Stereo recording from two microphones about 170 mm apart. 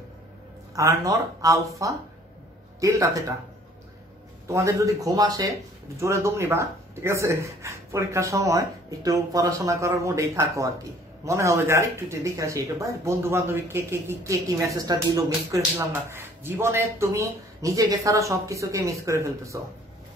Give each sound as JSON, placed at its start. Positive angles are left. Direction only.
{"t": 0.7, "sound": "speech", "side_deg": -20}
{"t": 4.5, "sound": "speech", "side_deg": -20}